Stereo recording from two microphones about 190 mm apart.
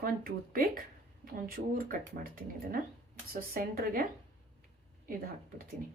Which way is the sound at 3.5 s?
50° right (ahead or behind).